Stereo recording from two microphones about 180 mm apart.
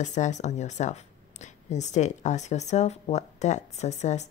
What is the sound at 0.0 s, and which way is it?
A woman's voice, 40° left (ahead or behind).